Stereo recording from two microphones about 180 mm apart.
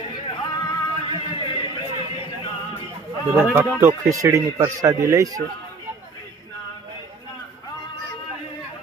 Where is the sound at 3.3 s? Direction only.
10° right (ahead or behind).